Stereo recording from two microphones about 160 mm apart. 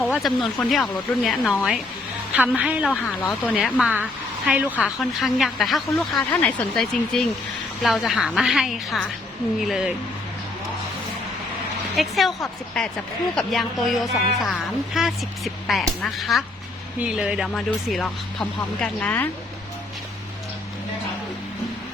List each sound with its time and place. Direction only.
0.0 s a woman's voice: centre (ahead or behind)
2.9 s speech: 15° left (ahead or behind)
3.5 s a woman's voice: 5° right (ahead or behind)
11.9 s speech: centre (ahead or behind)